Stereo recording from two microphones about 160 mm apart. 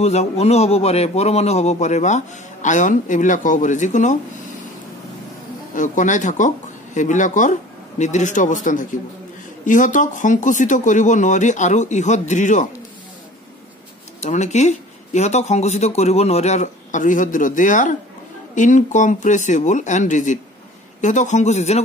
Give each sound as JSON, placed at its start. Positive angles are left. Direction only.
{"t": 0.0, "sound": "a man's voice", "side_deg": 40}
{"t": 5.8, "sound": "a man's voice", "side_deg": 50}
{"t": 14.2, "sound": "a man's voice", "side_deg": 45}